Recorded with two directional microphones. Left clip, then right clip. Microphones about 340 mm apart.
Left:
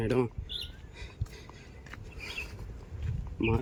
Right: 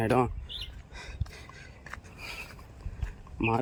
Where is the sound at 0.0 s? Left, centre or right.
Centre.